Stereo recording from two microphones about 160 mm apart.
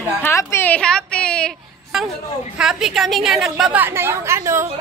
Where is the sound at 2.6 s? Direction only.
5° right (ahead or behind).